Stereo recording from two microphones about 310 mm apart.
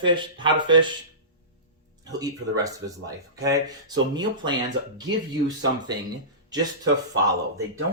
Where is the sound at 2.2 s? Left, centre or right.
Centre.